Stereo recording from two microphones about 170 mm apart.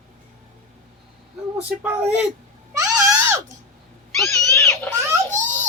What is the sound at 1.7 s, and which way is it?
Speech, 10° right (ahead or behind).